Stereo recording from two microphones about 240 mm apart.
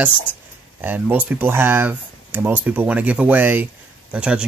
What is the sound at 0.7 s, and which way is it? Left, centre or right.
Speech, centre.